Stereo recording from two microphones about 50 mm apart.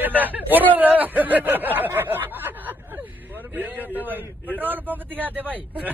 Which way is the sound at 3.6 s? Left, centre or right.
Right.